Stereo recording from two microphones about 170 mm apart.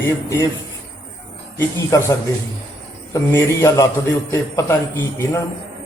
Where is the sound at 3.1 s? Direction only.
15° left (ahead or behind).